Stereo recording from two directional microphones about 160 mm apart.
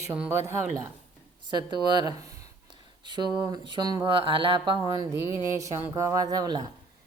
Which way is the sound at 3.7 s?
25° right (ahead or behind).